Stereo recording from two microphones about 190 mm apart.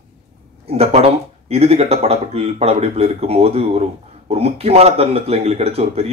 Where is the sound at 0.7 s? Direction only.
30° right (ahead or behind).